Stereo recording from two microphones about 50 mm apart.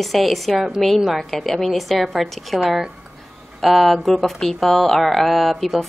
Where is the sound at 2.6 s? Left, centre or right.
Centre.